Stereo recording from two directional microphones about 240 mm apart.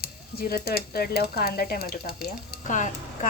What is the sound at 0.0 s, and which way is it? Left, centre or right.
Speech, left.